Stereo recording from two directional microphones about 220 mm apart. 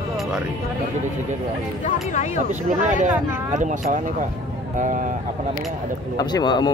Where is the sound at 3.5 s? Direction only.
35° right (ahead or behind).